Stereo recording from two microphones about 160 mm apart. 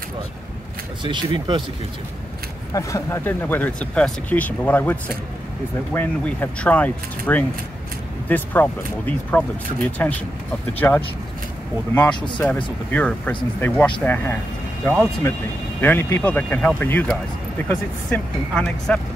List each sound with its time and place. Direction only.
1.0 s speech: 30° right (ahead or behind)
2.7 s speech: 20° left (ahead or behind)
15.8 s speech: 15° left (ahead or behind)